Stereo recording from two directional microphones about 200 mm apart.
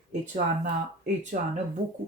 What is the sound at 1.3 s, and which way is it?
Speech, 35° right (ahead or behind).